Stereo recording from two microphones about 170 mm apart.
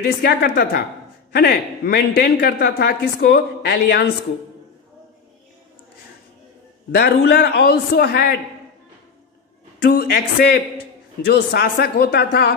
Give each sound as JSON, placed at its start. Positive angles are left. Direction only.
{"t": 0.0, "sound": "a man's voice", "side_deg": 65}
{"t": 6.9, "sound": "a man's voice", "side_deg": 65}
{"t": 9.8, "sound": "a man's voice", "side_deg": 65}